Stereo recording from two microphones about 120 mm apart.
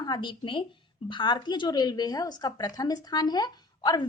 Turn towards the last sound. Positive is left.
turn(degrees=35)  # may be behind; listen again after turning